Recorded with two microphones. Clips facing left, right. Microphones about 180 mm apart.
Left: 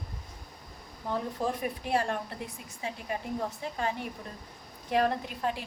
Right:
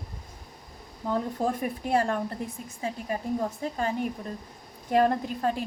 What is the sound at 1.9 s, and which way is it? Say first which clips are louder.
Speech: right 4 dB; 45° right (ahead or behind).